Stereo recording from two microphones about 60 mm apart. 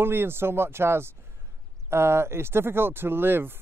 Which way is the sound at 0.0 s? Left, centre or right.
Right.